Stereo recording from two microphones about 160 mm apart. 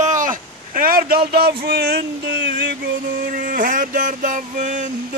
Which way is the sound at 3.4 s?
60° right (ahead or behind).